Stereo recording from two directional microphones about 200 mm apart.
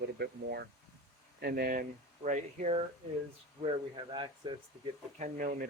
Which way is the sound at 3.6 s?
25° right (ahead or behind).